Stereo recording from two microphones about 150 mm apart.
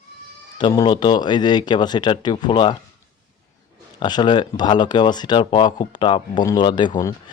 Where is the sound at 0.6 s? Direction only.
30° left (ahead or behind).